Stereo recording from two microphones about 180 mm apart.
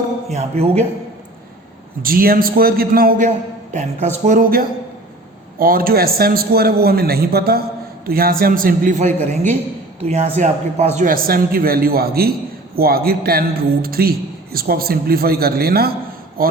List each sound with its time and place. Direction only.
0.3 s a man's voice: 40° right (ahead or behind)
2.0 s a man's voice: 55° right (ahead or behind)